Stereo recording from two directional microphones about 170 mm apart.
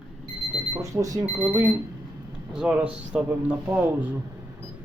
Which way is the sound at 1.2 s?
10° right (ahead or behind).